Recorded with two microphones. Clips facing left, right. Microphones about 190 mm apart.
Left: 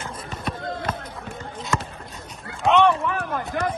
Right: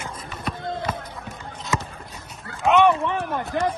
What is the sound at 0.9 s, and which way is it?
Run, 10° right (ahead or behind).